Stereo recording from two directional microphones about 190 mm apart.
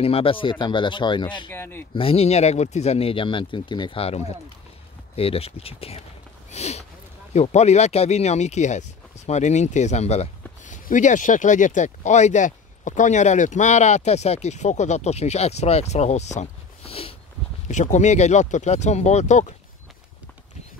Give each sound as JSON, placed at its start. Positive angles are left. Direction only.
{"t": 0.0, "sound": "speech", "side_deg": 30}
{"t": 1.5, "sound": "speech", "side_deg": 10}
{"t": 2.0, "sound": "speech", "side_deg": 30}
{"t": 6.5, "sound": "a sound", "side_deg": 35}
{"t": 7.3, "sound": "speech", "side_deg": 35}